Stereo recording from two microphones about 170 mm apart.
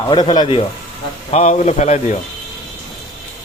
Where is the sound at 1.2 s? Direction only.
40° left (ahead or behind).